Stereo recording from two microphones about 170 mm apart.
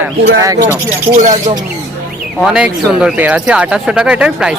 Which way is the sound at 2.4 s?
5° right (ahead or behind).